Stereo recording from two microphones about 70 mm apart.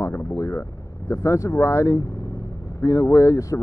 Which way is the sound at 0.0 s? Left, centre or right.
Left.